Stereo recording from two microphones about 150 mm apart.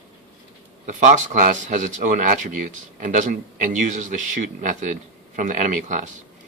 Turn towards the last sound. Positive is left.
turn(degrees=-60)  # may be behind; listen again after turning